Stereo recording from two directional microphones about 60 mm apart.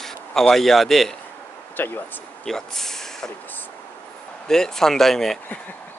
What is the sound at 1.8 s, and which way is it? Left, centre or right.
Speech, left.